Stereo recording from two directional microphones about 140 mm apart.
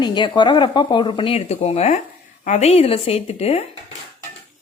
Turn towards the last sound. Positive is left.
turn(degrees=45)  # may be behind; listen again after turning